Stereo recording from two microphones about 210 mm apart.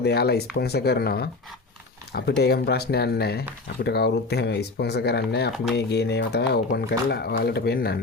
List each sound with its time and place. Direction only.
0.0 s speech: 50° left (ahead or behind)